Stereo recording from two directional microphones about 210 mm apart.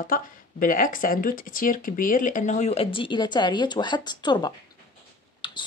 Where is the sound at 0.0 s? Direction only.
40° left (ahead or behind).